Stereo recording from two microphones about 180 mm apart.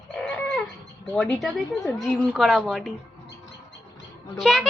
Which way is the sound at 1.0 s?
5° left (ahead or behind).